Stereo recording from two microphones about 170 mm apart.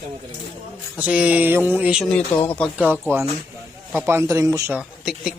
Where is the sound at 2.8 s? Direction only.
10° right (ahead or behind).